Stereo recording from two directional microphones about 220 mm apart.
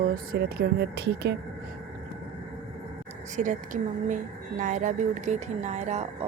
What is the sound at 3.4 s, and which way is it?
Speech, 35° right (ahead or behind).